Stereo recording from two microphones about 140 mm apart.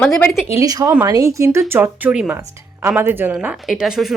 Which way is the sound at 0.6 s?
25° right (ahead or behind).